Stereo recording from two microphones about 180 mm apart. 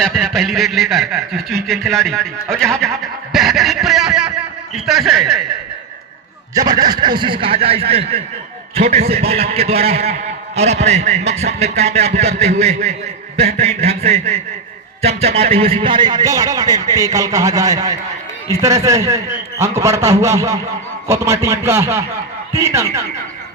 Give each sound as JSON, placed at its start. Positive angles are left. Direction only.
{"t": 0.0, "sound": "a man's voice", "side_deg": 0}
{"t": 6.5, "sound": "a man's voice", "side_deg": -20}